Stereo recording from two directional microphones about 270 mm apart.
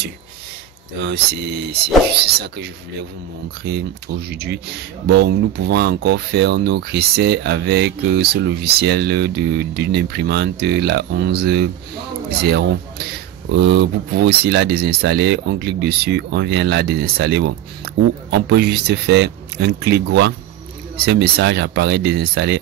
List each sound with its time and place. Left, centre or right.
2.2 s speech: right